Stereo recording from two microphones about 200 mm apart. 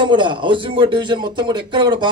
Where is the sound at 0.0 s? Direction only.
25° right (ahead or behind).